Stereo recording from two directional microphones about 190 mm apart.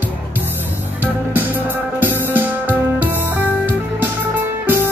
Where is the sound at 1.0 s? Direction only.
10° right (ahead or behind).